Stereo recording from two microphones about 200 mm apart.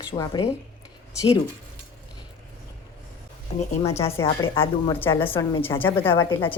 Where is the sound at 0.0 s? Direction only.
25° left (ahead or behind).